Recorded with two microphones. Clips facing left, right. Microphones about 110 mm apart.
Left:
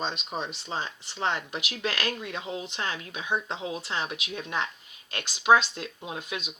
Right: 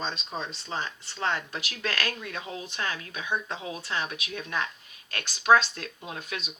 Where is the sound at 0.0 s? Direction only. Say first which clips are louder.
Left 2 dB; 15° left (ahead or behind).